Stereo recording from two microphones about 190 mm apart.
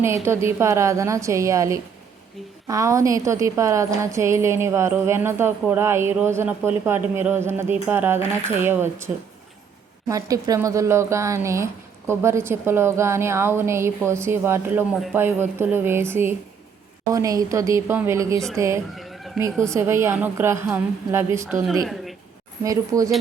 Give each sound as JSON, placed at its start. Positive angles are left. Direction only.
{"t": 0.0, "sound": "speech", "side_deg": -15}
{"t": 10.1, "sound": "speech", "side_deg": -20}
{"t": 18.9, "sound": "chicken", "side_deg": 0}
{"t": 19.4, "sound": "speech", "side_deg": -15}
{"t": 21.7, "sound": "speech", "side_deg": 0}
{"t": 22.6, "sound": "speech", "side_deg": -15}